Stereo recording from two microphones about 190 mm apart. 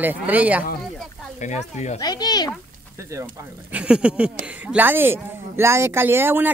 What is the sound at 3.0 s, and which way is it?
Speech, 15° right (ahead or behind).